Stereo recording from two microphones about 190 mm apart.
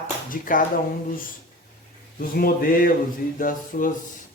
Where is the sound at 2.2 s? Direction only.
50° left (ahead or behind).